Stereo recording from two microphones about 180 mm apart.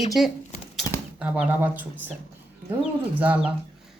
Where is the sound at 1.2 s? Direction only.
10° right (ahead or behind).